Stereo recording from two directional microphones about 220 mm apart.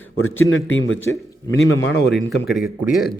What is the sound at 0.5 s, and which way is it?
A man's voice, 60° left (ahead or behind).